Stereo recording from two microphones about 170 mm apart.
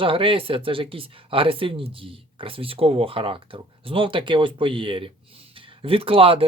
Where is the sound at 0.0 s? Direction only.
30° right (ahead or behind).